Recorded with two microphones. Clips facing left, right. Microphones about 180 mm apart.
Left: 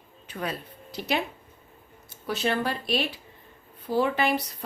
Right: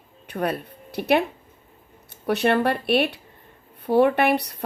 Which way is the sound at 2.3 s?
65° right (ahead or behind).